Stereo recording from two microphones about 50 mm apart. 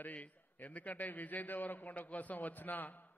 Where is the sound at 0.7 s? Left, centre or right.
Left.